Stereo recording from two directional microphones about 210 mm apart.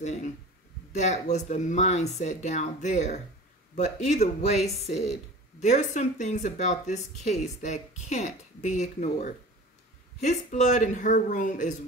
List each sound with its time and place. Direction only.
0.0 s speech: 35° left (ahead or behind)